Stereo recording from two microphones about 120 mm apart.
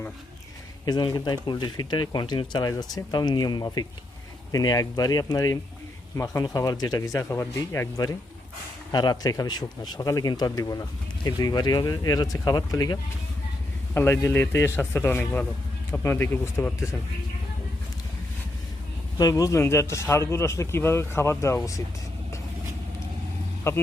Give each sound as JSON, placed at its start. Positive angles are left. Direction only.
{"t": 0.9, "sound": "speech", "side_deg": 35}
{"t": 13.9, "sound": "speech", "side_deg": 20}
{"t": 19.2, "sound": "speech", "side_deg": 30}
{"t": 23.7, "sound": "speech", "side_deg": 25}